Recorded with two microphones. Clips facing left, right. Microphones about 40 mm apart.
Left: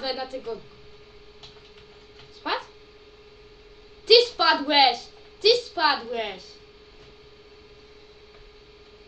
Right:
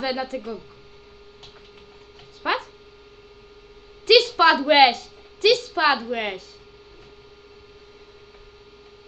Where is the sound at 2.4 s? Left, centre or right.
Right.